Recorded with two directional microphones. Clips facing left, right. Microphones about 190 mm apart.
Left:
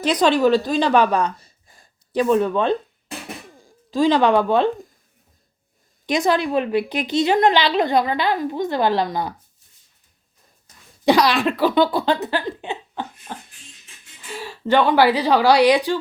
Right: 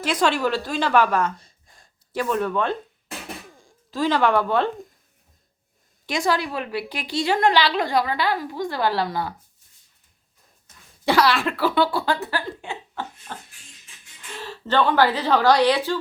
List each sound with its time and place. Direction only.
0.0 s a woman's voice: 20° left (ahead or behind)
1.4 s gasp: 5° left (ahead or behind)
2.1 s a woman's voice: 20° left (ahead or behind)
3.9 s a woman's voice: 15° left (ahead or behind)
6.1 s a woman's voice: 20° left (ahead or behind)
11.0 s speech: 15° left (ahead or behind)
14.3 s a woman's voice: 10° left (ahead or behind)